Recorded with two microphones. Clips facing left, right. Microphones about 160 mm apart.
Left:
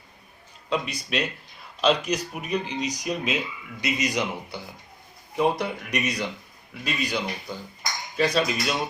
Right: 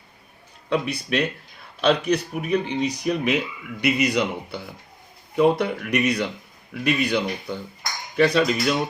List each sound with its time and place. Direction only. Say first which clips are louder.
0.7 s speech: right 4 dB; 60° right (ahead or behind)